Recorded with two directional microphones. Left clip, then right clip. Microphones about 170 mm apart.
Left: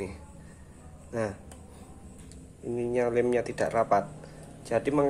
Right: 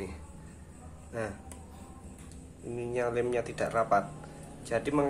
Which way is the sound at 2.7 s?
35° left (ahead or behind).